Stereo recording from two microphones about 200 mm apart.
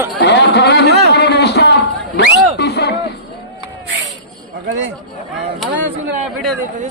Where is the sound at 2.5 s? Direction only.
55° left (ahead or behind).